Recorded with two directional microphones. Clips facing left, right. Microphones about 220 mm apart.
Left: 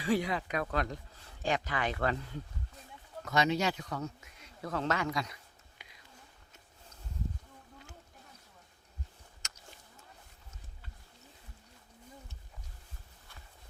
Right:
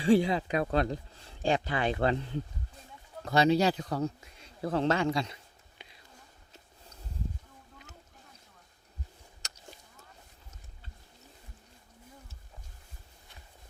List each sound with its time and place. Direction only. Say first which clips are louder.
0.0 s speech: right 7 dB; 30° right (ahead or behind)
9.4 s livestock: right 3 dB; 35° right (ahead or behind)